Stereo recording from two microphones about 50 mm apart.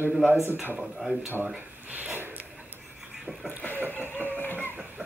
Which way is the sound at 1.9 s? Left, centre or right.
Right.